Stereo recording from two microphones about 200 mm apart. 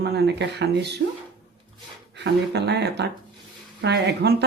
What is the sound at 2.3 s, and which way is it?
A woman's voice, 55° right (ahead or behind).